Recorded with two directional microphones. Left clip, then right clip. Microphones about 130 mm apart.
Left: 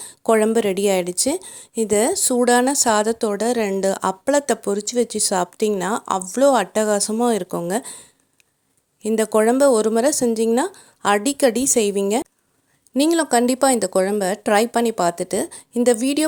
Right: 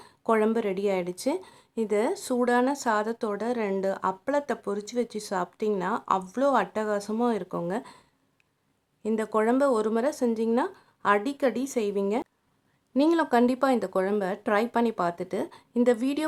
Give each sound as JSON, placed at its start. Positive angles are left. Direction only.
{"t": 0.0, "sound": "a woman's voice", "side_deg": 40}
{"t": 9.0, "sound": "a woman's voice", "side_deg": 45}